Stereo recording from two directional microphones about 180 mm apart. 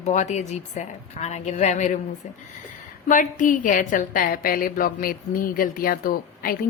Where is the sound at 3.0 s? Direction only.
45° left (ahead or behind).